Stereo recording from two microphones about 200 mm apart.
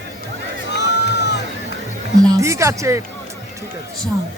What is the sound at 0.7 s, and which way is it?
Crowd, 60° left (ahead or behind).